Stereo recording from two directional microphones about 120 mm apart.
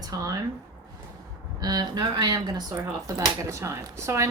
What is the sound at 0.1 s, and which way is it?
Speech, 30° right (ahead or behind).